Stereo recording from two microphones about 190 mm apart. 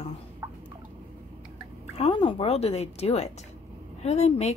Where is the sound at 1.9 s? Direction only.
30° left (ahead or behind).